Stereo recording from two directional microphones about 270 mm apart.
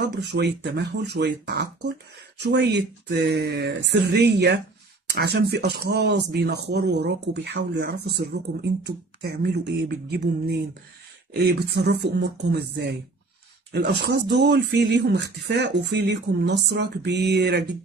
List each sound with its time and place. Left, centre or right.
0.1 s speech: right